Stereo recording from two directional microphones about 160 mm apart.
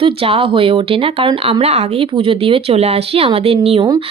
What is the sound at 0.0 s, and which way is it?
A woman's voice, 35° right (ahead or behind).